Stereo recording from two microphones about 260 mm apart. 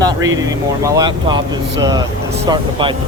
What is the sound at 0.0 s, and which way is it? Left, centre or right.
Speech, centre.